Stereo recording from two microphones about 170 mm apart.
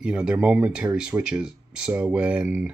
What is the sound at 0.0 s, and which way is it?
Speech, 5° right (ahead or behind).